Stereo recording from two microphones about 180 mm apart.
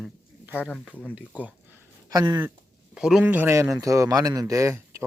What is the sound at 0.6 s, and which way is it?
Speech, 5° left (ahead or behind).